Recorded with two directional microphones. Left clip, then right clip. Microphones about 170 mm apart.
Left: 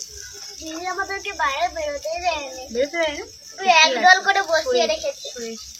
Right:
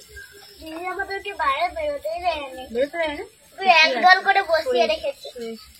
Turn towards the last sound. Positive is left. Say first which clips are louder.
# left 1 dB
turn(degrees=-10)  # may be behind; listen again after turning